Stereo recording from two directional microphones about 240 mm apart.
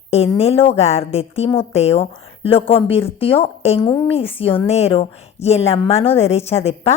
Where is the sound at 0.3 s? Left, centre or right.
Left.